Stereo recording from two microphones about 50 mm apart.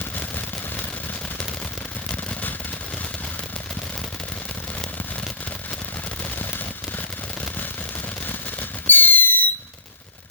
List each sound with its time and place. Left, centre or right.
8.9 s fireworks: left